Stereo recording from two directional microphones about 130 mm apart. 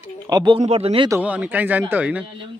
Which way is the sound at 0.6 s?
50° right (ahead or behind).